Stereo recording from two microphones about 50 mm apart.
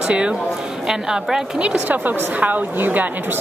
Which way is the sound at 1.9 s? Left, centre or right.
Right.